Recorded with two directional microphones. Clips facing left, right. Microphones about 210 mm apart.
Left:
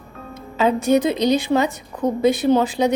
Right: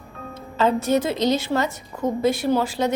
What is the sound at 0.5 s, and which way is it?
A woman's voice, 15° left (ahead or behind).